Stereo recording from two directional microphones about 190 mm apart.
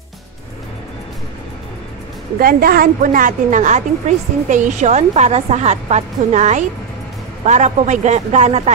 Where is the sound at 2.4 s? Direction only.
50° right (ahead or behind).